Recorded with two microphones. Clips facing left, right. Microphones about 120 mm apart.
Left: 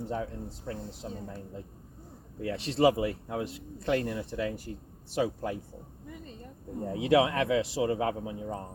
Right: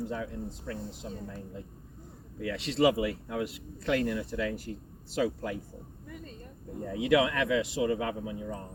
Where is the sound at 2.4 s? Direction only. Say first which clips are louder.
Left 1 dB; 30° left (ahead or behind).